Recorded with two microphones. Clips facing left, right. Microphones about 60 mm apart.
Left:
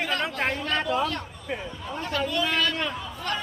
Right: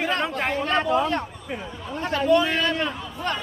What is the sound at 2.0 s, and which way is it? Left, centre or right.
A man's voice, right.